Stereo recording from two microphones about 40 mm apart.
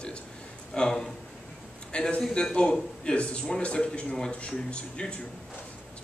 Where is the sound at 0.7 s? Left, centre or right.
Centre.